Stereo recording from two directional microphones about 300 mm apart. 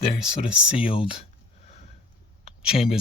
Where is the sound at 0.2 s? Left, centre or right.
Centre.